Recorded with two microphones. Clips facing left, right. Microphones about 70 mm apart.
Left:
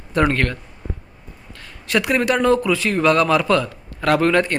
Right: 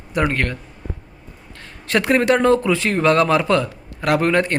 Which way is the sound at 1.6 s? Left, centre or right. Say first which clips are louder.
Right 1 dB; right.